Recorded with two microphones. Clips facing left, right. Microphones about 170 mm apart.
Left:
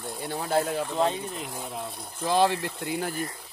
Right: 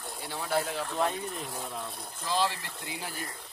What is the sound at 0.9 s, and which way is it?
Speech, 25° left (ahead or behind).